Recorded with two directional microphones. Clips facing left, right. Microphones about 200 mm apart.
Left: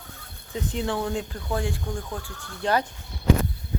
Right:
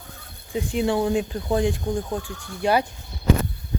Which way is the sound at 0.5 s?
15° right (ahead or behind).